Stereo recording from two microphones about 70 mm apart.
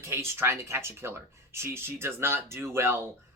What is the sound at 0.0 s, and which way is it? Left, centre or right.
Speech, right.